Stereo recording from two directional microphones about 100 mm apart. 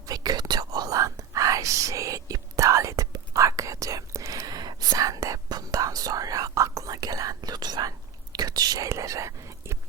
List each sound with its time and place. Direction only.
0.0 s whispering: 40° right (ahead or behind)